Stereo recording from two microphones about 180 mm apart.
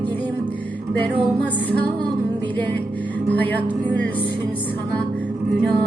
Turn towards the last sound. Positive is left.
turn(degrees=10)  # may be behind; listen again after turning